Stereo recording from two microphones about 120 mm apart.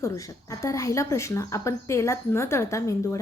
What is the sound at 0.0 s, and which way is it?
A woman's voice, 25° left (ahead or behind).